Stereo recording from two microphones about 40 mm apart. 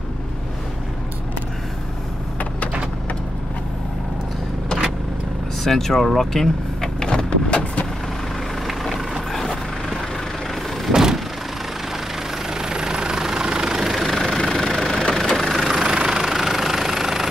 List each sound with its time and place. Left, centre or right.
5.6 s vehicle: centre; by 7.8 s left
9.3 s vehicle: centre
10.9 s vehicle: centre
12.4 s vehicle: centre
14.0 s vehicle: centre
15.6 s vehicle: centre